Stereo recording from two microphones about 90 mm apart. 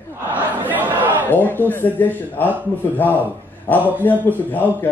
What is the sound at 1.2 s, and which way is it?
Speech, 20° left (ahead or behind).